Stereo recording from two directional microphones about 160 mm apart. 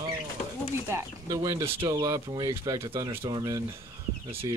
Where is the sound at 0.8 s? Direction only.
20° right (ahead or behind).